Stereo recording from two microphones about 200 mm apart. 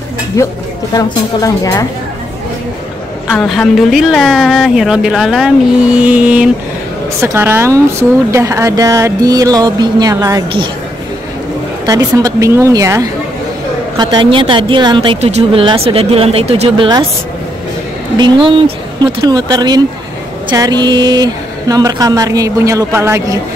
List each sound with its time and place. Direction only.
0.3 s a woman's voice: 15° left (ahead or behind)
3.3 s a woman's voice: centre (ahead or behind); by 10.7 s 20° right (ahead or behind)
11.8 s a woman's voice: 15° right (ahead or behind)
18.1 s a woman's voice: 20° right (ahead or behind)